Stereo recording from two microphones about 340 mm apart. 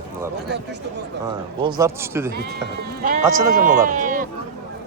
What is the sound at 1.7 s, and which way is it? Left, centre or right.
Speech, centre.